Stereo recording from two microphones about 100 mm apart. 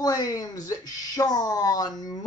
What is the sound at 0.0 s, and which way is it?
Speech, 40° left (ahead or behind).